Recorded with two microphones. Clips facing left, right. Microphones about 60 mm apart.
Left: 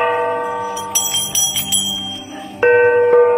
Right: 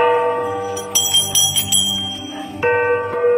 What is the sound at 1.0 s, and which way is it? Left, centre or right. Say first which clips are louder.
Bicycle bell: right 3 dB; left.